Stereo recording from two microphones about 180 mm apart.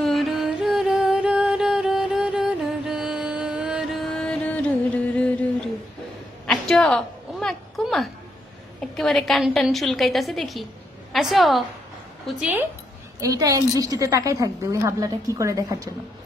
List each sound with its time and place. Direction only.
0.0 s music: centre (ahead or behind)
6.4 s a sound: centre (ahead or behind)
8.9 s a woman's voice: centre (ahead or behind)
13.2 s a woman's voice: 20° right (ahead or behind)